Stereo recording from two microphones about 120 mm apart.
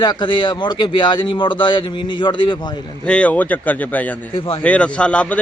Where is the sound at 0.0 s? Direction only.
40° left (ahead or behind).